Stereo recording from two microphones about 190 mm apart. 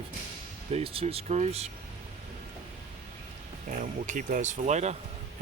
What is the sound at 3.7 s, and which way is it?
Speech, 45° right (ahead or behind).